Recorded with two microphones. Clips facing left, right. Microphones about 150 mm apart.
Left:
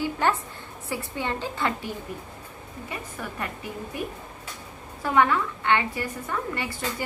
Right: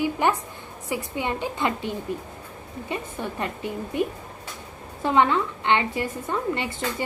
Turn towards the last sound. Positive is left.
turn(degrees=-25)  # may be behind; listen again after turning